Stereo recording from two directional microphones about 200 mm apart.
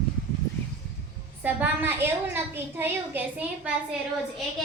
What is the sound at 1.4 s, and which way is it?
A child's voice, 10° right (ahead or behind).